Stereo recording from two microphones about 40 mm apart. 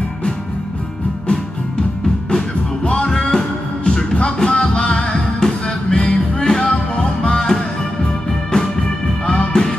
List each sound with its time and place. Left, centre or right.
3.1 s music: centre
9.2 s music: left